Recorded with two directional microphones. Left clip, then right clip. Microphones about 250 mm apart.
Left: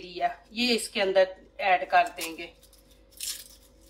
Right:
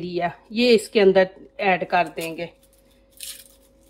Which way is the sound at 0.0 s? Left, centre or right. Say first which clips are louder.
Right 4 dB; right.